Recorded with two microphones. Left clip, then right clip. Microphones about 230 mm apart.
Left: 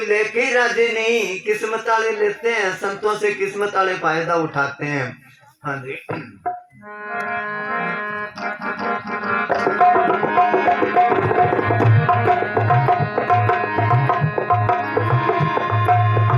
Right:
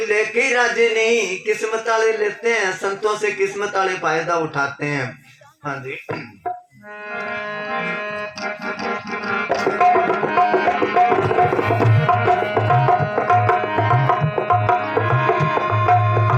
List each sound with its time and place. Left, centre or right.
0.1 s speech: right
7.2 s music: right
9.7 s music: right